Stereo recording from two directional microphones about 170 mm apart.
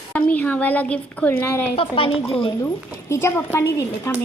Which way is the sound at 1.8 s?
30° left (ahead or behind).